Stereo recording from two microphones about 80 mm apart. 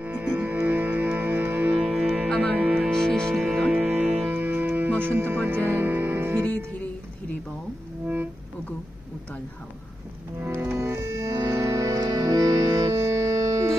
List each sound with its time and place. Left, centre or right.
0.0 s music: centre
1.8 s music: centre
2.2 s music: centre
2.5 s music: centre
2.9 s music: centre
3.3 s music: centre
3.7 s music: centre
10.4 s music: right